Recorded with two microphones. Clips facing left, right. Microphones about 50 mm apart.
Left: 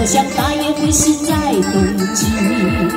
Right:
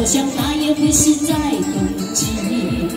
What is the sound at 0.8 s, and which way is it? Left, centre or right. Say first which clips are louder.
Music: left 1 dB; left.